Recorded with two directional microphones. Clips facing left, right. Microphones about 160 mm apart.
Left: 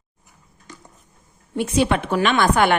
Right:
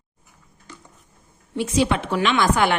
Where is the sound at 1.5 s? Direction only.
55° left (ahead or behind).